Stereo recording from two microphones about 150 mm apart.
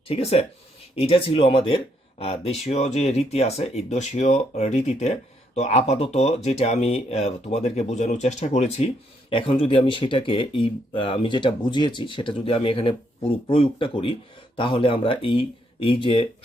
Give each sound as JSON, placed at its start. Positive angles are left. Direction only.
{"t": 0.1, "sound": "speech", "side_deg": 45}
{"t": 9.3, "sound": "speech", "side_deg": 35}